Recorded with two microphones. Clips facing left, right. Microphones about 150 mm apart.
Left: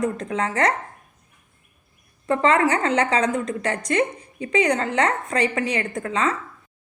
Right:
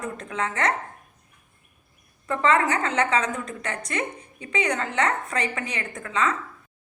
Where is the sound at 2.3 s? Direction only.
35° left (ahead or behind).